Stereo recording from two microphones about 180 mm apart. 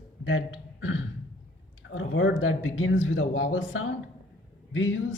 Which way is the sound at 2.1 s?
90° left.